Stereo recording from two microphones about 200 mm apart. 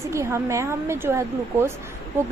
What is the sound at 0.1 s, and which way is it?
A woman's voice, 15° right (ahead or behind).